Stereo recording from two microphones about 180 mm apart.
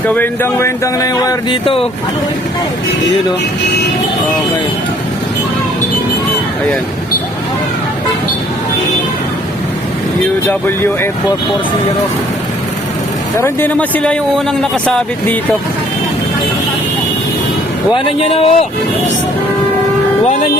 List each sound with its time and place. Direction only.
0.0 s speech: 10° left (ahead or behind); by 1.9 s 30° left (ahead or behind)
13.4 s a man's voice: 10° left (ahead or behind)
17.9 s speech: 30° left (ahead or behind)